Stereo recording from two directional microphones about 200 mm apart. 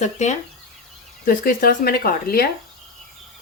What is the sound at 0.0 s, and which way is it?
Speech, 35° left (ahead or behind).